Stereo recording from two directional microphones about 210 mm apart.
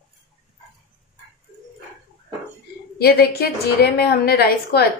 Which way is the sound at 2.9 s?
50° left (ahead or behind).